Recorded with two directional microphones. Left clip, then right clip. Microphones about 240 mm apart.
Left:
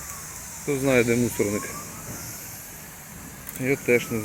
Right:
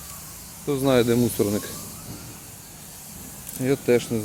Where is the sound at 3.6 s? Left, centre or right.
Centre.